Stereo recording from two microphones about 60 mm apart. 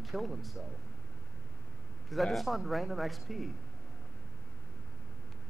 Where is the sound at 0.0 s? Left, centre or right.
Centre.